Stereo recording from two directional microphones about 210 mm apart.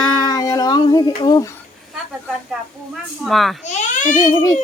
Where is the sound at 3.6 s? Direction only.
35° left (ahead or behind).